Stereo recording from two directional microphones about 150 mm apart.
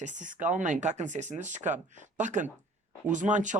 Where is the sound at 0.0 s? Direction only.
55° right (ahead or behind).